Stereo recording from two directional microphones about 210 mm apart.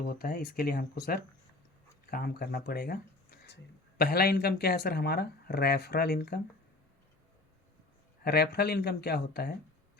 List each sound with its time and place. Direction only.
0.0 s speech: 45° left (ahead or behind)
8.2 s speech: 50° left (ahead or behind)